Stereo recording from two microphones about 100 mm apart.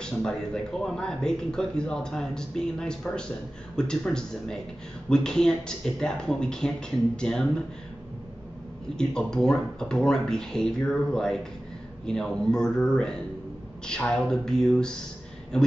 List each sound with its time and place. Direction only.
0.0 s speech: 5° left (ahead or behind)
8.9 s speech: 5° left (ahead or behind)